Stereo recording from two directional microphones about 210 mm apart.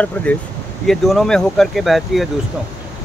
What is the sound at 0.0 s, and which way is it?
Speech, 5° left (ahead or behind).